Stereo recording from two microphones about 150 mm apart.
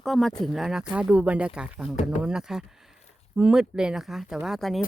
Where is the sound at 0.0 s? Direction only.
Centre (ahead or behind).